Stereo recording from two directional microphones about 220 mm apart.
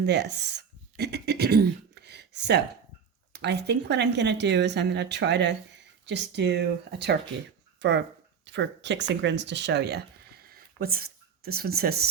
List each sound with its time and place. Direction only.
0.0 s speech: 50° right (ahead or behind)